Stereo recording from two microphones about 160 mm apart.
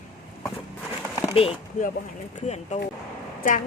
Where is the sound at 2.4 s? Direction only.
45° left (ahead or behind).